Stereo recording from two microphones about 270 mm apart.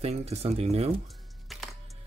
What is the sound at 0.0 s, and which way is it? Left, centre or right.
Speech, right.